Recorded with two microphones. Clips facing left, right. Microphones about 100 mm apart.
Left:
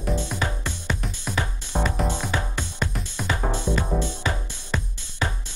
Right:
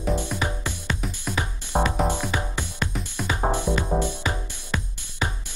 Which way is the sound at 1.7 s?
40° right (ahead or behind).